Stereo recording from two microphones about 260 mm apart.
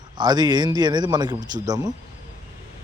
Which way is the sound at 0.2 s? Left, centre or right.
Centre.